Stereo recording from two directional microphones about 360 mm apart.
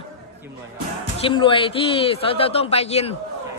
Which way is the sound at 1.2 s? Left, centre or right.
Centre.